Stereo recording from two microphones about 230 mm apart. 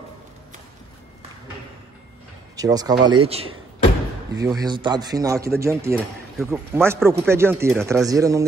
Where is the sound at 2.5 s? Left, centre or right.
Centre.